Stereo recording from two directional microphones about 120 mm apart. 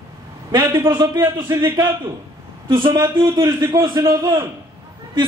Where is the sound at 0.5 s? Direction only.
35° right (ahead or behind).